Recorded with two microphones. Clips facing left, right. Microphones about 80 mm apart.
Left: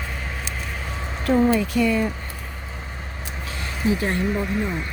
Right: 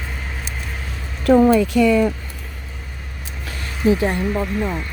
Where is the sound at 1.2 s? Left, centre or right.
Right.